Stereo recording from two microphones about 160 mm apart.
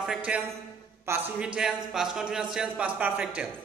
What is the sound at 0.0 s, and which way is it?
Speech, 5° right (ahead or behind).